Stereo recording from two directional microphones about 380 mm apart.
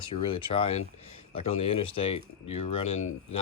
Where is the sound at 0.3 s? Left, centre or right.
Centre.